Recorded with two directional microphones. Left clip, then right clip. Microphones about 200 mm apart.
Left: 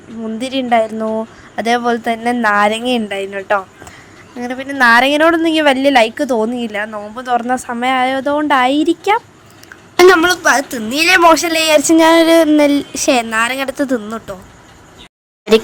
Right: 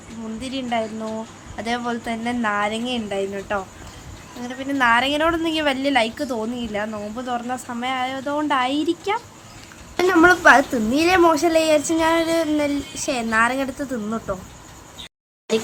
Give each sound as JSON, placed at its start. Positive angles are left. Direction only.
{"t": 0.3, "sound": "a woman's voice", "side_deg": 35}
{"t": 10.2, "sound": "a woman's voice", "side_deg": 0}
{"t": 10.7, "sound": "speech", "side_deg": 55}